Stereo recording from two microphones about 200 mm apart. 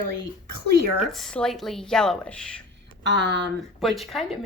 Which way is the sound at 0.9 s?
Centre (ahead or behind).